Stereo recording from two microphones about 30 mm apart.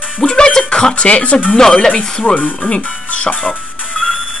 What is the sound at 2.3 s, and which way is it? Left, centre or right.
Speech, left.